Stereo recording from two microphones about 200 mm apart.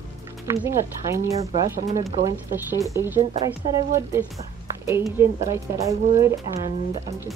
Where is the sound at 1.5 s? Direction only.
35° right (ahead or behind).